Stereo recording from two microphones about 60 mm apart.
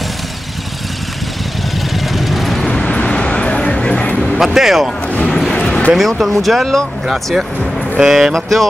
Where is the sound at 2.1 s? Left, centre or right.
Centre.